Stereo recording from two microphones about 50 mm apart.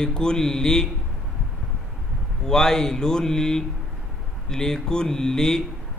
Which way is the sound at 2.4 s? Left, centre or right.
Centre.